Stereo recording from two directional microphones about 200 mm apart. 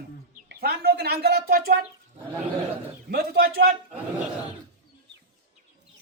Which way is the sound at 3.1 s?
50° right (ahead or behind).